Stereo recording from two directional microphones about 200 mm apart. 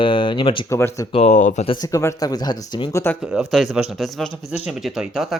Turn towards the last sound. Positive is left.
turn(degrees=-5)  # may be behind; listen again after turning